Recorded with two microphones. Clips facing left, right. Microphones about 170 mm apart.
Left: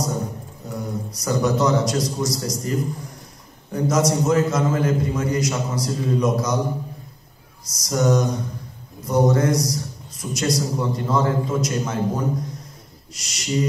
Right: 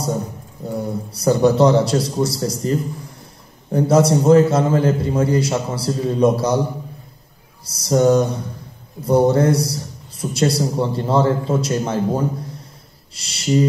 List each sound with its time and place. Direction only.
0.7 s a man's voice: 30° right (ahead or behind)
7.6 s a man's voice: 30° right (ahead or behind)
13.1 s a sound: 30° right (ahead or behind)